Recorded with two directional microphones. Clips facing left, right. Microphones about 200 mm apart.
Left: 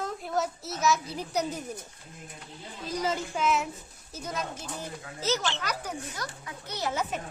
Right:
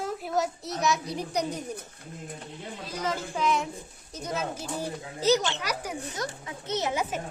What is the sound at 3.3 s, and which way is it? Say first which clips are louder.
A child's voice: right 1 dB; 5° left (ahead or behind).